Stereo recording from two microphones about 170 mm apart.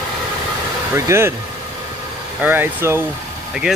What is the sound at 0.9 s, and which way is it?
Speech, 15° right (ahead or behind).